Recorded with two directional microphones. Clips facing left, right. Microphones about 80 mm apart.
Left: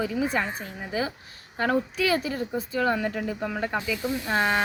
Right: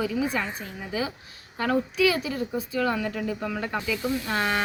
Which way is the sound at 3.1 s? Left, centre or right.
Centre.